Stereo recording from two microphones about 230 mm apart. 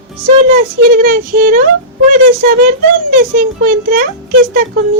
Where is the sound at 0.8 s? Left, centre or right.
Right.